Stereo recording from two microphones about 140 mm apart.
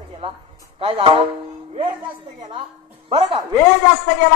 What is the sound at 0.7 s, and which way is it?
Speech, 40° right (ahead or behind).